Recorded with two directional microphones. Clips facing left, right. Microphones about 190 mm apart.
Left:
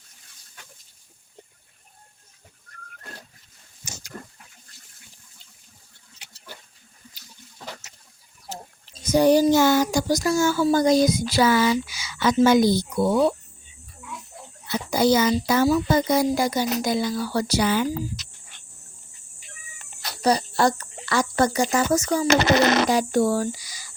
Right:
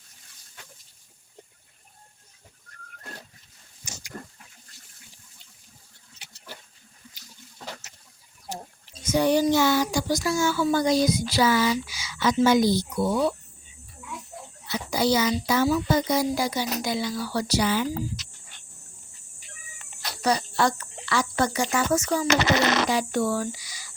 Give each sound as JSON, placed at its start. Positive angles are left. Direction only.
{"t": 9.0, "sound": "a child's voice", "side_deg": 40}
{"t": 14.7, "sound": "a child's voice", "side_deg": 50}
{"t": 20.2, "sound": "speech", "side_deg": 35}